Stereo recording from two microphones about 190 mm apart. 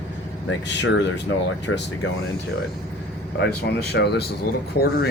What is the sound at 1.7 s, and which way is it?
Speech, 90° left.